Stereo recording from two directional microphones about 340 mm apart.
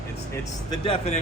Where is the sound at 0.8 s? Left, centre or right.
Centre.